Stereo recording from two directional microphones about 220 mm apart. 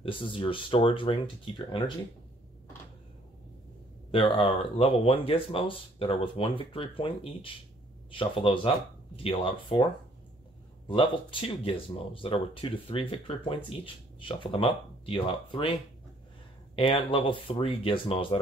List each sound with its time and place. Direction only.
0.0 s speech: 25° left (ahead or behind)
4.1 s speech: 25° left (ahead or behind)
10.9 s speech: 20° left (ahead or behind)
16.7 s speech: 25° left (ahead or behind)